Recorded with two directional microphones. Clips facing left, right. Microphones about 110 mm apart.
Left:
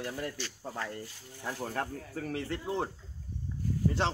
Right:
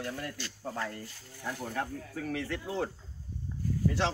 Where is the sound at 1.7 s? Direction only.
40° left (ahead or behind).